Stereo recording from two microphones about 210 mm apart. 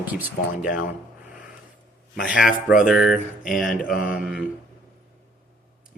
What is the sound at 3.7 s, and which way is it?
Speech, 40° left (ahead or behind).